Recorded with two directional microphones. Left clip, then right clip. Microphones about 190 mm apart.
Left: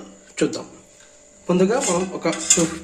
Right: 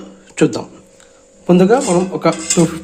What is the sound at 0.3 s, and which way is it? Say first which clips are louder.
Speech: right 7 dB; 45° right (ahead or behind).